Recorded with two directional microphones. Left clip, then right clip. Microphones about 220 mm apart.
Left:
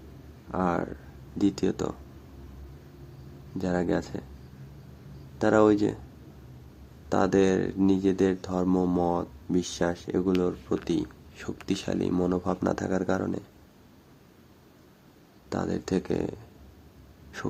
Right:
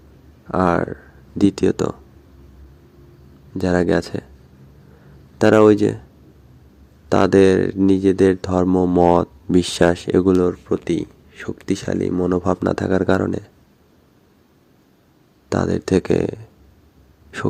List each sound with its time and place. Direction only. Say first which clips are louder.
0.5 s speech: right 10 dB; 30° right (ahead or behind)
3.6 s speech: right 10 dB; 25° right (ahead or behind)
5.4 s speech: right 9 dB; 25° right (ahead or behind)
7.1 s speech: right 10 dB; 25° right (ahead or behind)
8.6 s speech: right 7 dB; 15° right (ahead or behind)
9.0 s speech: right 13 dB; 35° right (ahead or behind)
10.8 s speech: right 7 dB; 20° right (ahead or behind)
15.4 s speech: right 10 dB; 25° right (ahead or behind)